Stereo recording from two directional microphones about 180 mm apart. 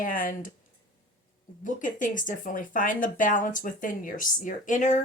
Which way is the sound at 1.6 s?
45° left (ahead or behind).